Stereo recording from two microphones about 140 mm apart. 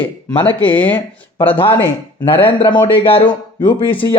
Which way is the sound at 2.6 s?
35° left (ahead or behind).